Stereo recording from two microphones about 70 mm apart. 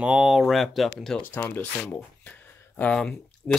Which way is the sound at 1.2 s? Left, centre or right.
Left.